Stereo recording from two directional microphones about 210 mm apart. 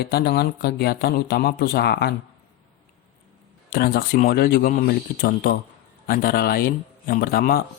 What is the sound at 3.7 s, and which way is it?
Speech, 45° left (ahead or behind).